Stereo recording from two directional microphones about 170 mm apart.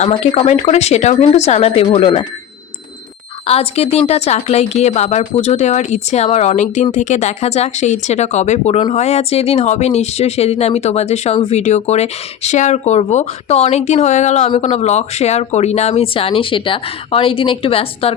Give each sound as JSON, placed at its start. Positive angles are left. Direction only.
{"t": 0.1, "sound": "speech", "side_deg": 35}
{"t": 3.4, "sound": "speech", "side_deg": 35}